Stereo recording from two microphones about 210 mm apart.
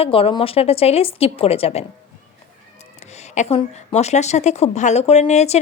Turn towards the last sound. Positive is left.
turn(degrees=30)  # may be behind; listen again after turning